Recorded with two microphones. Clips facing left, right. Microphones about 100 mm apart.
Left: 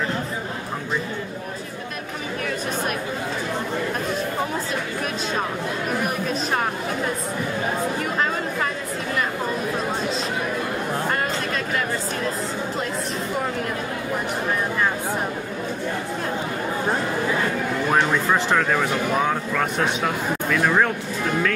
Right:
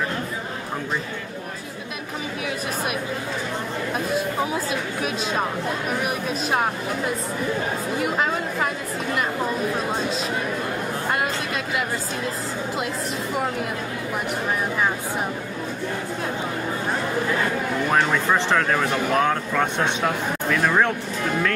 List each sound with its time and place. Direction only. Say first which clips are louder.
6.0 s speech: left 1 dB; 5° right (ahead or behind)
8.0 s speech: right 1 dB; 5° right (ahead or behind)
11.1 s chatter: even; 10° right (ahead or behind)
18.1 s speech: even; centre (ahead or behind)